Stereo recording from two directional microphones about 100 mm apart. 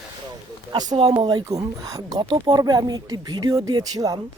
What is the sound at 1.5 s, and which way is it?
Speech, 35° right (ahead or behind).